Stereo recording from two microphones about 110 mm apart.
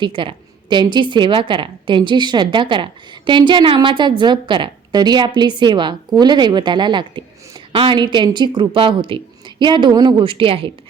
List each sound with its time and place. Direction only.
0.0 s a woman's voice: 50° right (ahead or behind)